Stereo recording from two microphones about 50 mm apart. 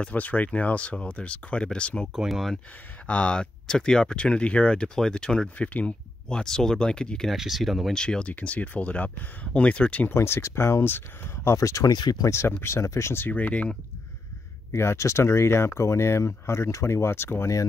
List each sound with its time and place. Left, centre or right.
0.0 s speech: left
2.1 s speech: centre
3.1 s speech: left
5.6 s speech: left
6.2 s speech: centre
7.3 s speech: centre
7.9 s speech: centre
8.3 s speech: left
10.0 s speech: left
11.4 s speech: left
12.3 s speech: left
12.7 s speech: left
13.3 s speech: left
14.7 s speech: left